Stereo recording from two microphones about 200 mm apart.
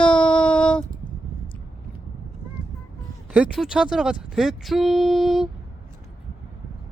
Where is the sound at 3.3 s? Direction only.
5° right (ahead or behind).